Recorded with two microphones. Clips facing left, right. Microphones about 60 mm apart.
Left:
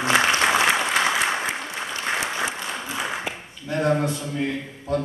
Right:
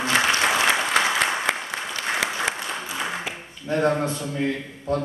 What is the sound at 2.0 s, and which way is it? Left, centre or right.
Applause, right.